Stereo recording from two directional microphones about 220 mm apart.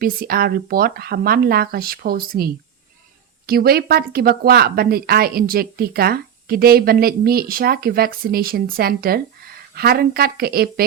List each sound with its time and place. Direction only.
0.0 s speech: 40° right (ahead or behind)